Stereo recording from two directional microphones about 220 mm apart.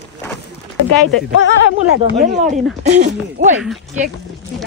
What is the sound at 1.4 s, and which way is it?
Speech, 60° left (ahead or behind).